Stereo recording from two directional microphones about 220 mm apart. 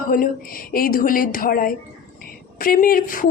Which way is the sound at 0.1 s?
40° left (ahead or behind).